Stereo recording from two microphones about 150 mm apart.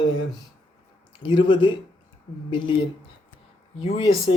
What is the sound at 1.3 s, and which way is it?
Speech, 35° left (ahead or behind).